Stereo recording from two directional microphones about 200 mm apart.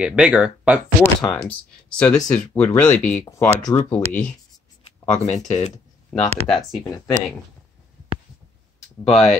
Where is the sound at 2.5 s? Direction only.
10° left (ahead or behind).